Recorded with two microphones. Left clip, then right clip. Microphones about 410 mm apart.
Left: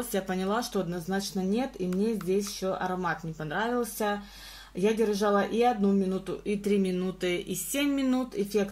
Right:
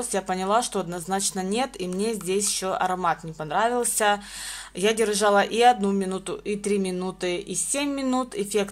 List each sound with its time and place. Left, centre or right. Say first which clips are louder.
0.1 s speech: right 7 dB; centre